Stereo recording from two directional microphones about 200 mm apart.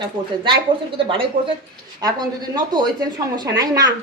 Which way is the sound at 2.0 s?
20° right (ahead or behind).